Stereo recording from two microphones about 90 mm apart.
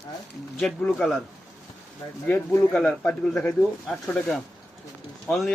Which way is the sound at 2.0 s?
40° left (ahead or behind).